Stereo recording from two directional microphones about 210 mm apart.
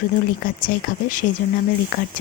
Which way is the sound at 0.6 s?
40° left (ahead or behind).